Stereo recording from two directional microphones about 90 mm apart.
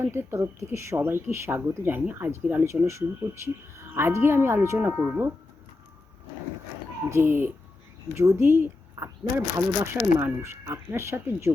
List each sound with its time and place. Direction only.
0.0 s speech: 30° right (ahead or behind)
7.1 s speech: 25° right (ahead or behind)